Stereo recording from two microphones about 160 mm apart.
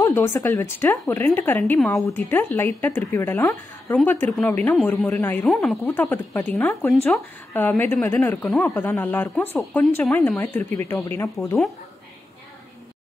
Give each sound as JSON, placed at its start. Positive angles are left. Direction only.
{"t": 0.0, "sound": "a woman's voice", "side_deg": 15}
{"t": 5.9, "sound": "a woman's voice", "side_deg": 15}